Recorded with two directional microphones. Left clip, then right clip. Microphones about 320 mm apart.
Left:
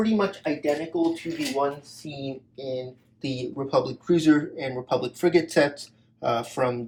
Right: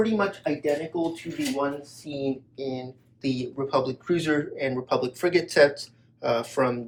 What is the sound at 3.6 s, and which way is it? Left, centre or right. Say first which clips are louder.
Speech: left 2 dB; centre.